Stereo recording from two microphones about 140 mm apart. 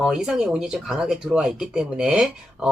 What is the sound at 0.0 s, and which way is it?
Speech, 5° right (ahead or behind).